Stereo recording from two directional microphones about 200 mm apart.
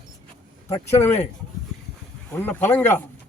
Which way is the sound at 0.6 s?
15° left (ahead or behind).